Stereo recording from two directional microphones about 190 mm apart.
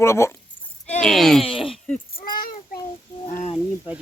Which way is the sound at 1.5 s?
30° left (ahead or behind).